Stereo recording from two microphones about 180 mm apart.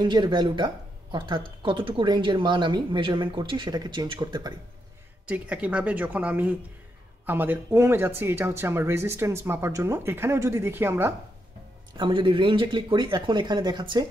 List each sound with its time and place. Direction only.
0.0 s speech: 25° right (ahead or behind)
5.2 s speech: 10° right (ahead or behind)
12.0 s speech: 30° right (ahead or behind)